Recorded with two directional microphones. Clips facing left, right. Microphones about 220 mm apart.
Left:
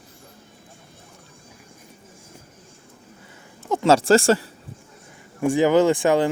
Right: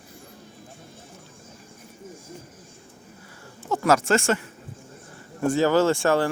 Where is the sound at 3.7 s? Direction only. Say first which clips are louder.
Left 5 dB; 25° left (ahead or behind).